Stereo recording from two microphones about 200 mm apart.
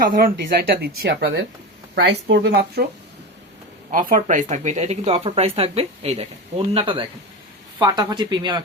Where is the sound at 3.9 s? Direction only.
40° right (ahead or behind).